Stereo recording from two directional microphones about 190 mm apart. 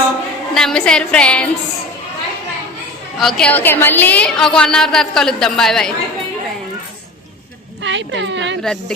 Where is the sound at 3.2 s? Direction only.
5° left (ahead or behind).